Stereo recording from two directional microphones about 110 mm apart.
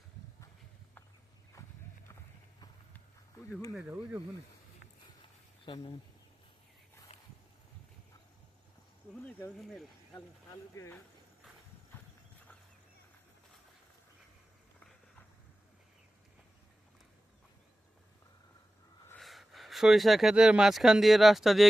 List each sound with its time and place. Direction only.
1.6 s horse: 30° left (ahead or behind)
3.8 s speech: 15° right (ahead or behind)
5.6 s speech: 50° left (ahead or behind)
9.6 s speech: centre (ahead or behind)
19.2 s speech: centre (ahead or behind)